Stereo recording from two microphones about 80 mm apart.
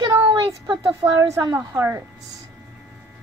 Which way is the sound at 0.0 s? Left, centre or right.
Right.